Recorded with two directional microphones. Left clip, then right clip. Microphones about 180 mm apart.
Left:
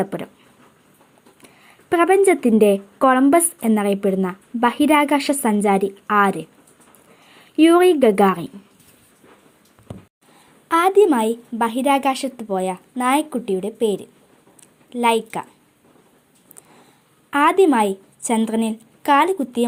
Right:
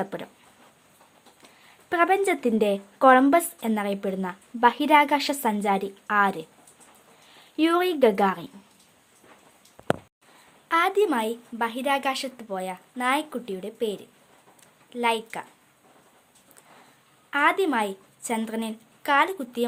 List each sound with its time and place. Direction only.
0.0 s speech: 15° left (ahead or behind)
1.4 s a woman's voice: 20° left (ahead or behind)
10.7 s a woman's voice: 20° left (ahead or behind)
17.3 s a woman's voice: 25° left (ahead or behind)